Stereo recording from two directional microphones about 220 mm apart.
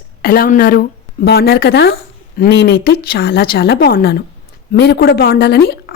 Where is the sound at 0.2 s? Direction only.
40° left (ahead or behind).